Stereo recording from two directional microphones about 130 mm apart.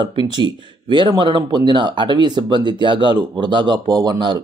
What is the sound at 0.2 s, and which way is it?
Speech, 35° right (ahead or behind).